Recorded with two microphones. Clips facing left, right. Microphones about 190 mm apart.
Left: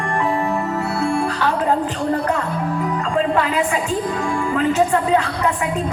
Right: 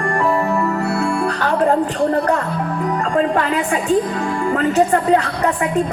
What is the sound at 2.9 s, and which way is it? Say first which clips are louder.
A woman's voice: right 3 dB; 50° right (ahead or behind).